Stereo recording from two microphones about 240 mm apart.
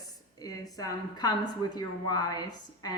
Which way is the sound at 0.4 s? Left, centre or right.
Centre.